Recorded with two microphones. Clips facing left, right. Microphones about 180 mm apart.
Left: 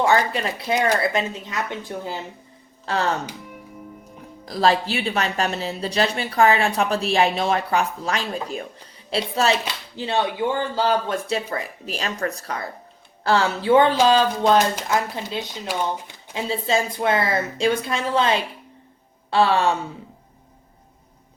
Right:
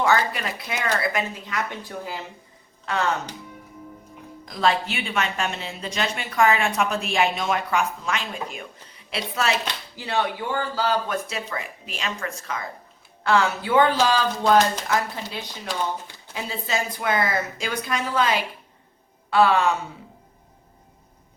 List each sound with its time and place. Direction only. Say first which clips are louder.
0.0 s speech: left 2 dB; 30° left (ahead or behind)
4.4 s speech: left 3 dB; 35° left (ahead or behind)